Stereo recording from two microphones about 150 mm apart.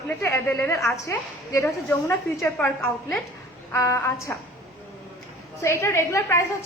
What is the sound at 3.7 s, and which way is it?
Speech, 20° left (ahead or behind).